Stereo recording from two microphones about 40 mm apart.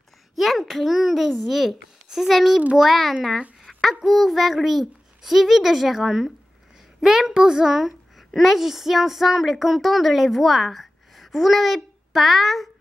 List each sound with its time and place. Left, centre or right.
0.4 s a child's voice: centre; by 7.7 s right
7.7 s a child's voice: centre